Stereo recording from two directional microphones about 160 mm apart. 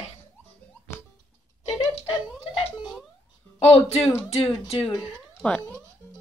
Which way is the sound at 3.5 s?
40° left (ahead or behind).